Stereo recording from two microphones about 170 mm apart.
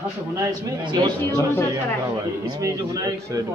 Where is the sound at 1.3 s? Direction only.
15° left (ahead or behind).